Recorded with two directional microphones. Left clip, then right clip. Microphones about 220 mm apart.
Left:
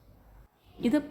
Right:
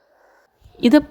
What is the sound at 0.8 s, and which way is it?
Speech, 40° right (ahead or behind).